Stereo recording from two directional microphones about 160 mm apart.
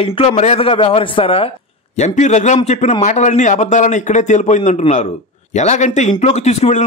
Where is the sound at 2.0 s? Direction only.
45° left (ahead or behind).